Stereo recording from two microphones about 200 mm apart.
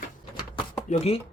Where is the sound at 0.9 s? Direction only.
30° left (ahead or behind).